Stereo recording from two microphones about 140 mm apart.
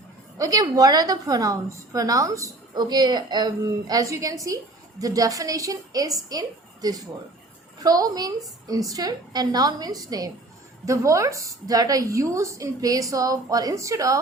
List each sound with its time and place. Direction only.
0.3 s a woman's voice: 25° right (ahead or behind)